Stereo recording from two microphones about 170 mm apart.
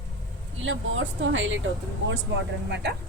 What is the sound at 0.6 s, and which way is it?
Speech, 90° right.